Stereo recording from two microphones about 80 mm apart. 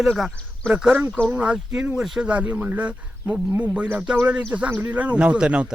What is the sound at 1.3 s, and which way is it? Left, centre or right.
Speech, centre.